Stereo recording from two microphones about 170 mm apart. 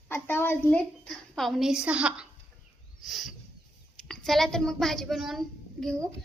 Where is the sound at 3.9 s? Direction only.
Centre (ahead or behind).